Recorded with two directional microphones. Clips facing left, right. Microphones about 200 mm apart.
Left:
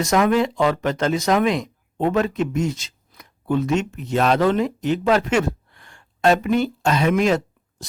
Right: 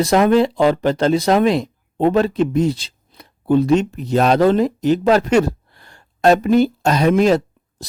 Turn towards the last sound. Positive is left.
turn(degrees=-35)  # may be behind; listen again after turning